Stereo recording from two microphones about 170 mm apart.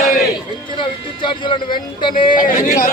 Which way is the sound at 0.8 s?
30° left (ahead or behind).